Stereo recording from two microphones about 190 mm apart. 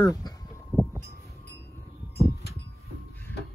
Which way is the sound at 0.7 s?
5° right (ahead or behind).